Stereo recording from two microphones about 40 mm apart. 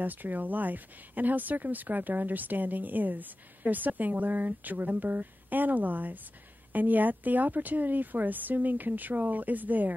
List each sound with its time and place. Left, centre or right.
0.0 s speech: right